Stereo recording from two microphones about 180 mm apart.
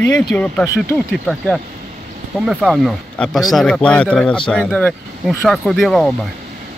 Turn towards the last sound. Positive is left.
turn(degrees=0)  # may be behind; listen again after turning